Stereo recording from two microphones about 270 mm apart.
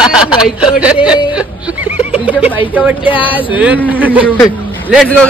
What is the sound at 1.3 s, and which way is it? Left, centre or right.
Music, centre.